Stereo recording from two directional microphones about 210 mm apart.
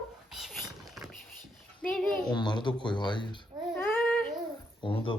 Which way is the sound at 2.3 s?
20° left (ahead or behind).